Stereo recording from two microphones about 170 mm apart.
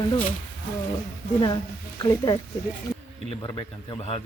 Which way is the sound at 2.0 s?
20° left (ahead or behind).